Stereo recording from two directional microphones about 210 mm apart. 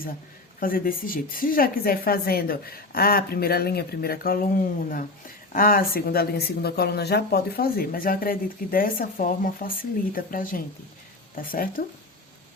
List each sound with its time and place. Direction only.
0.6 s speech: 40° left (ahead or behind)